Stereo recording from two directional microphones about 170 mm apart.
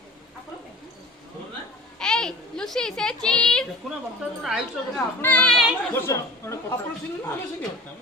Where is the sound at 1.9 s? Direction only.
5° left (ahead or behind).